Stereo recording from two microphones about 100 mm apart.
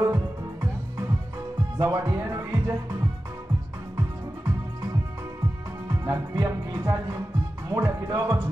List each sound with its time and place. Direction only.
0.0 s music: 30° right (ahead or behind)
5.9 s music: 25° right (ahead or behind)
7.7 s speech: 25° right (ahead or behind)